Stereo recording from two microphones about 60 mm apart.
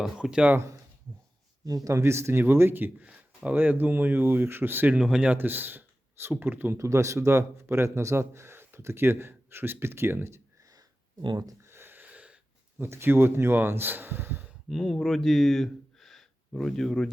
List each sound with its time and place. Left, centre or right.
0.0 s speech: centre
1.6 s speech: right
1.9 s speech: right
3.0 s a sound: right
3.5 s speech: right
6.7 s speech: right
11.6 s a sound: right
12.1 s wheeze: centre
12.8 s speech: right
14.7 s speech: centre